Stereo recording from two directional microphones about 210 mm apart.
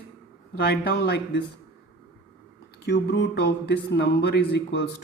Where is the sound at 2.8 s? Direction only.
55° left (ahead or behind).